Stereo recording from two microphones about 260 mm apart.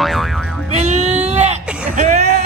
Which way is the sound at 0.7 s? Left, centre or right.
Right.